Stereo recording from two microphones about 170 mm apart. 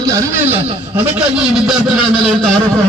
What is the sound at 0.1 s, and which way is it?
Speech, 20° right (ahead or behind).